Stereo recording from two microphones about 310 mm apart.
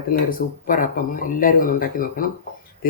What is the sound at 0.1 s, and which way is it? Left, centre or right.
Speech, left.